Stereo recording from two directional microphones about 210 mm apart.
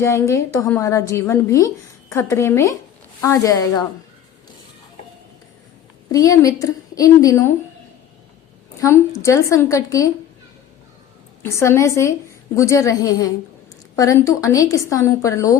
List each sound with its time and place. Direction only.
0.0 s a woman's voice: 15° left (ahead or behind)
6.1 s a woman's voice: 15° left (ahead or behind)
8.8 s a woman's voice: 15° left (ahead or behind)
11.4 s a woman's voice: 15° left (ahead or behind)